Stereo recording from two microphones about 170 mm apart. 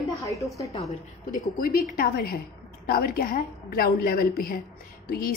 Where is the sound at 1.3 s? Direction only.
55° left (ahead or behind).